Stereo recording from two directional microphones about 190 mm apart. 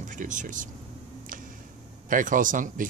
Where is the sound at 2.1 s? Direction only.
45° right (ahead or behind).